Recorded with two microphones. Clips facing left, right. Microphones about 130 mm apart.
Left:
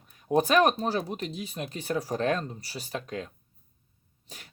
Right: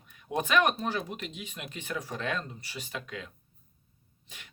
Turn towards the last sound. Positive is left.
turn(degrees=40)  # may be behind; listen again after turning